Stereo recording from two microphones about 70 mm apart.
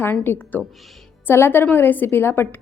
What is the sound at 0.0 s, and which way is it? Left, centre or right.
A woman's voice, left.